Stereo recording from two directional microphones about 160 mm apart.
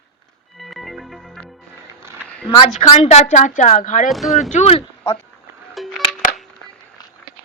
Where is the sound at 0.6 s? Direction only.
Centre (ahead or behind).